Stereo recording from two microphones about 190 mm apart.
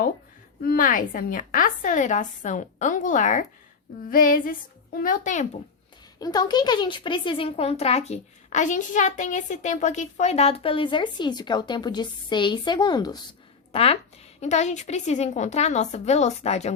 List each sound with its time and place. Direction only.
0.6 s a woman's voice: 50° left (ahead or behind)
6.1 s a woman's voice: 20° left (ahead or behind)